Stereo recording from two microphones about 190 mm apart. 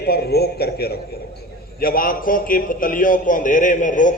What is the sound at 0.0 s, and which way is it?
A man's voice, 55° left (ahead or behind).